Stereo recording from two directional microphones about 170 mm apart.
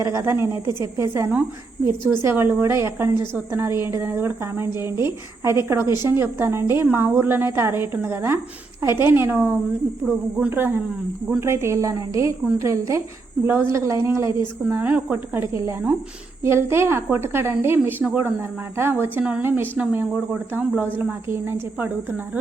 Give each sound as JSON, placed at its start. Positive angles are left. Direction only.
{"t": 0.0, "sound": "a woman's voice", "side_deg": -15}
{"t": 10.0, "sound": "speech", "side_deg": 0}
{"t": 10.3, "sound": "a woman's voice", "side_deg": -10}